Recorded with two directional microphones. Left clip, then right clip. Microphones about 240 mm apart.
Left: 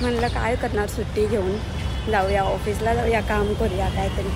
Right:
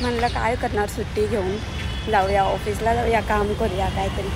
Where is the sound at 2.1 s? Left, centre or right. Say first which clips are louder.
Right 2 dB; centre.